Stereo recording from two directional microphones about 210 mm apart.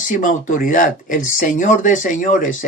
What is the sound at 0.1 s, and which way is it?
Speech, 40° left (ahead or behind).